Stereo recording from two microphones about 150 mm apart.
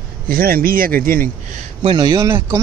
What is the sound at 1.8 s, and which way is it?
Speech, 30° right (ahead or behind).